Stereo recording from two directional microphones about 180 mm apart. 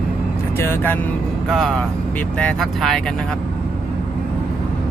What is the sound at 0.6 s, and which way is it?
Speech, 10° left (ahead or behind).